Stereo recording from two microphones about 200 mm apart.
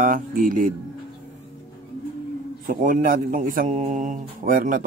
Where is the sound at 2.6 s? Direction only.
40° right (ahead or behind).